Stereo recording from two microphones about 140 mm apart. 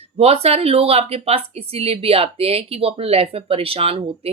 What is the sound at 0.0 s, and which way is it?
Speech, 45° right (ahead or behind).